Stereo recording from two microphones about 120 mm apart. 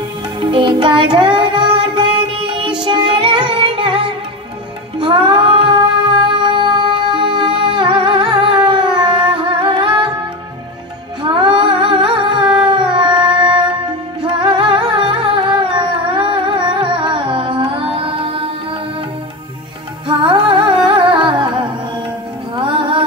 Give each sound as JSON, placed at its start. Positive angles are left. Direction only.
{"t": 0.4, "sound": "music", "side_deg": -45}
{"t": 4.9, "sound": "child singing", "side_deg": -40}
{"t": 6.3, "sound": "music", "side_deg": -40}
{"t": 11.2, "sound": "humming", "side_deg": -45}
{"t": 12.5, "sound": "howl", "side_deg": -40}
{"t": 14.2, "sound": "humming", "side_deg": -40}
{"t": 20.1, "sound": "music", "side_deg": -45}